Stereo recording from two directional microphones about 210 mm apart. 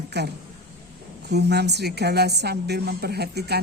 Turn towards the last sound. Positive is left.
turn(degrees=-50)  # may be behind; listen again after turning